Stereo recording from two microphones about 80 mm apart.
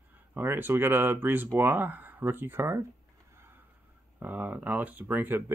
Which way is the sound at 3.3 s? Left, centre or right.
Right.